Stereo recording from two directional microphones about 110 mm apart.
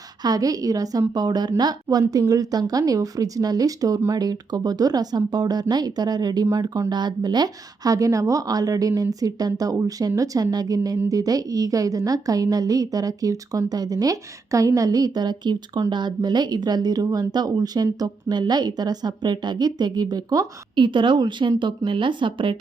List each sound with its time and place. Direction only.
0.2 s a woman's voice: 35° right (ahead or behind)
20.7 s a woman's voice: 50° right (ahead or behind)